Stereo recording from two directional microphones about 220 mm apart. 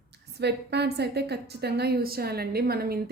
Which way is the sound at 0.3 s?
50° right (ahead or behind).